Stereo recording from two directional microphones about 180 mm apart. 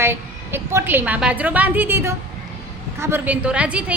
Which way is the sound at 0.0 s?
15° right (ahead or behind).